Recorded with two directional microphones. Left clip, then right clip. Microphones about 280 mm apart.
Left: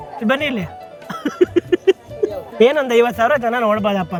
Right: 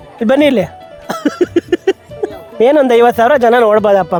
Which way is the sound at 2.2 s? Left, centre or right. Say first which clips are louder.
Right 1 dB; centre.